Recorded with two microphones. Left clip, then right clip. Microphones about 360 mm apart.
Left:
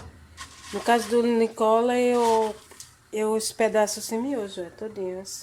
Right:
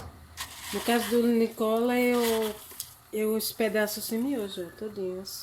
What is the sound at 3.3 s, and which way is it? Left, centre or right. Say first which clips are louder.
Speech: left 7 dB; centre.